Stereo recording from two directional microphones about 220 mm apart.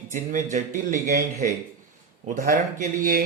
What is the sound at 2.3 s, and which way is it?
Speech, 35° right (ahead or behind).